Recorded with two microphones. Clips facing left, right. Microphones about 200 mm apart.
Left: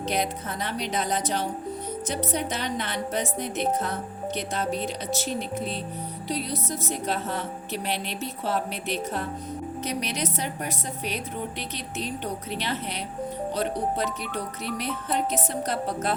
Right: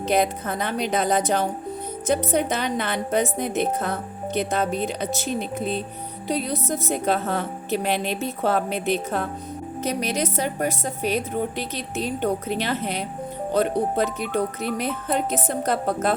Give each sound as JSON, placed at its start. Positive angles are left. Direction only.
{"t": 0.0, "sound": "a woman's voice", "side_deg": -55}
{"t": 9.8, "sound": "a woman's voice", "side_deg": -45}